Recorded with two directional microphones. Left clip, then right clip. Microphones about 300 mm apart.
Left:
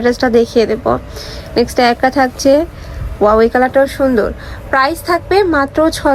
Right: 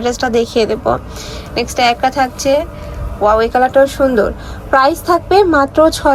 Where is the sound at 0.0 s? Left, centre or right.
Centre.